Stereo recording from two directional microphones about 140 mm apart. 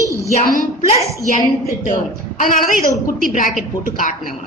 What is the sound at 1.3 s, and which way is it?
A woman's voice, 65° left (ahead or behind).